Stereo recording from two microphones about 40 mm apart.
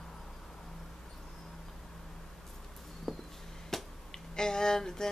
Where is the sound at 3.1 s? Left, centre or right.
Centre.